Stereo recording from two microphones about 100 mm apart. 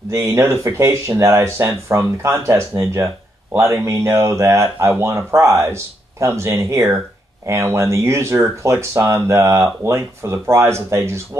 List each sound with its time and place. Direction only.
0.1 s speech: 25° right (ahead or behind)